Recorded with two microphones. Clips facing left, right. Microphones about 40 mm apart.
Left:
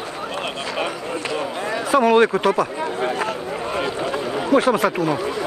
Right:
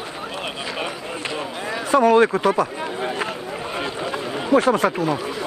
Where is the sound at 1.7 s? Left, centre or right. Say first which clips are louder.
Right 1 dB; centre.